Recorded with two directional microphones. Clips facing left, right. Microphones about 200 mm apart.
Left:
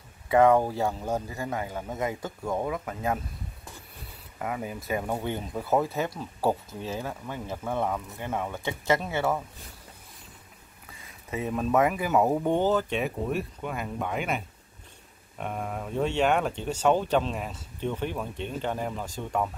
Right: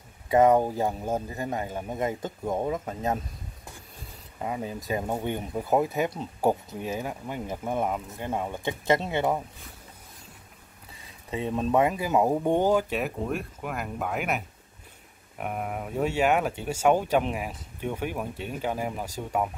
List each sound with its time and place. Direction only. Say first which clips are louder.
0.3 s speech: even; 20° right (ahead or behind)
4.4 s speech: right 1 dB; 25° right (ahead or behind)
11.2 s speech: right 1 dB; 25° right (ahead or behind); by 19.5 s 10° right (ahead or behind)